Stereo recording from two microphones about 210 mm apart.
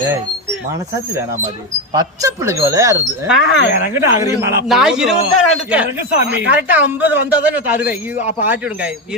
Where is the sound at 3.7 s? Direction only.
45° left (ahead or behind).